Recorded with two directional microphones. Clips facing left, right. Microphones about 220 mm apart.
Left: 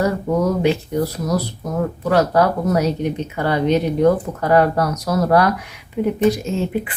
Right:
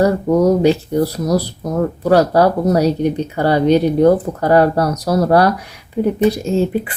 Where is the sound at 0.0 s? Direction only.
35° right (ahead or behind).